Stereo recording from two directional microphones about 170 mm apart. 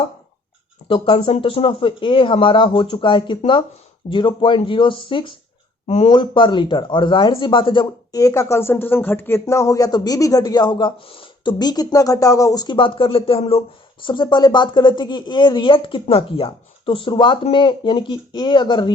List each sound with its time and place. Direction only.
0.9 s a man's voice: 30° left (ahead or behind)